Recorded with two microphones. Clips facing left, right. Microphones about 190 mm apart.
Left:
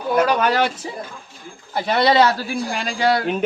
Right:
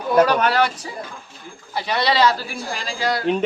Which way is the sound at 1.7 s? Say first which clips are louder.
Left 4 dB; 50° left (ahead or behind).